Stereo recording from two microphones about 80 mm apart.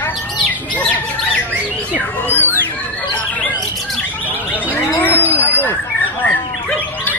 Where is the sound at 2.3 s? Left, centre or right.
Left.